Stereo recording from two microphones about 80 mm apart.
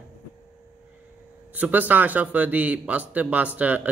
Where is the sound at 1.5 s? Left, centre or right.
Right.